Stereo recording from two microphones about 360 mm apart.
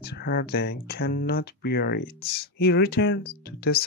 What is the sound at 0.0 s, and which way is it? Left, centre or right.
Speech, left.